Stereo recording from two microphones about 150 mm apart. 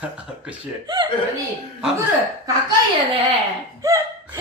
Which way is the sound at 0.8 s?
30° right (ahead or behind).